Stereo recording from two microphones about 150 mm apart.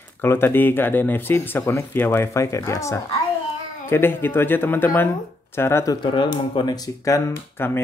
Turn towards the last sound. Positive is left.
turn(degrees=15)  # may be behind; listen again after turning